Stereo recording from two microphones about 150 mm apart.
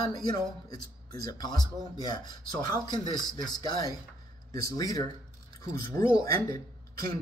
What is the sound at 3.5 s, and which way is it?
Speech, 25° left (ahead or behind).